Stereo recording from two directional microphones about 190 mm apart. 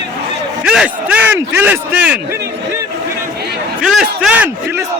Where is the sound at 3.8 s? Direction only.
Centre (ahead or behind).